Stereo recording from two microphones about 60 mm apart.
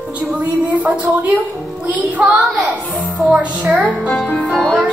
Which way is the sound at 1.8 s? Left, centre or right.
Right.